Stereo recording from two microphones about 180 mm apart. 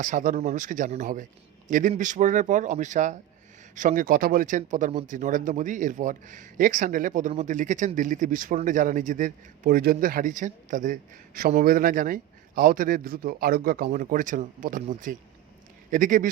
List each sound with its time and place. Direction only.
0.0 s a man's voice: 45° right (ahead or behind)